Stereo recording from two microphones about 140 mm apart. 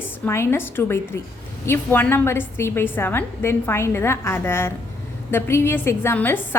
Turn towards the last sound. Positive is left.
turn(degrees=15)  # may be behind; listen again after turning